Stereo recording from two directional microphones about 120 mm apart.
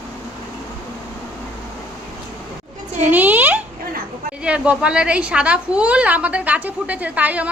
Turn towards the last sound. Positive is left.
turn(degrees=-10)  # may be behind; listen again after turning